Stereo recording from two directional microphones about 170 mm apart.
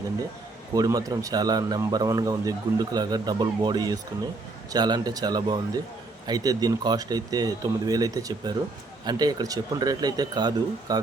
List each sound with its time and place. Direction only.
0.7 s speech: 20° right (ahead or behind)